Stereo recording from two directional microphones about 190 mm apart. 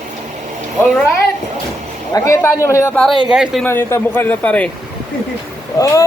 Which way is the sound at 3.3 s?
5° right (ahead or behind).